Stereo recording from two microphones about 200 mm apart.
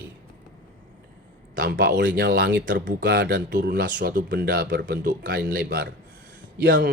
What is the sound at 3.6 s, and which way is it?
A man's voice, 55° right (ahead or behind).